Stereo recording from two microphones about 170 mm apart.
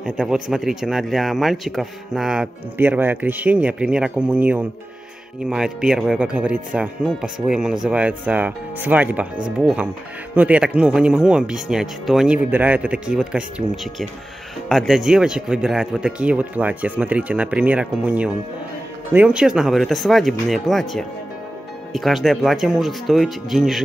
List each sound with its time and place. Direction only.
0.0 s speech: centre (ahead or behind)